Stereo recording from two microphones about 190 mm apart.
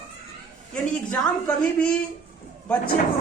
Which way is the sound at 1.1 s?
5° left (ahead or behind).